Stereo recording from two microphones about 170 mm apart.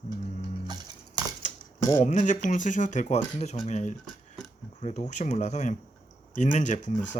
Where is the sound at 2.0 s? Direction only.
45° left (ahead or behind).